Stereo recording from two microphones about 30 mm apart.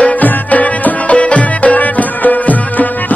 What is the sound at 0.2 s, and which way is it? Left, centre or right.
Music, left.